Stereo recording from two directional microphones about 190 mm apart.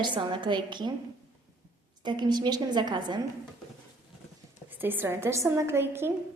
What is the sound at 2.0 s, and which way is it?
A woman's voice, 20° right (ahead or behind).